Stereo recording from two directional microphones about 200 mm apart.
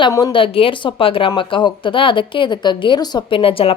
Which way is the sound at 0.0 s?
20° left (ahead or behind).